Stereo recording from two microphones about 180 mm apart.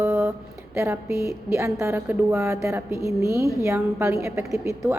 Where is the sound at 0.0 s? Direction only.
15° right (ahead or behind).